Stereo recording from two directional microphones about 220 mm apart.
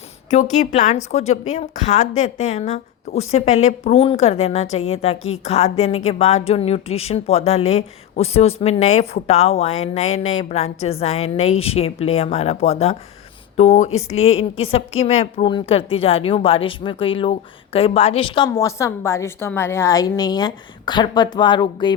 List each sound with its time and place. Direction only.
0.3 s a woman's voice: 30° left (ahead or behind)